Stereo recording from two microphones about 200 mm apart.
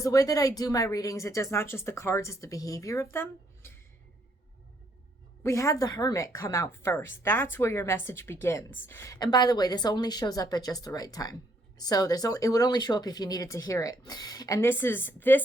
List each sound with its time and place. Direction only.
0.0 s speech: 15° left (ahead or behind)
5.4 s a woman's voice: 15° left (ahead or behind)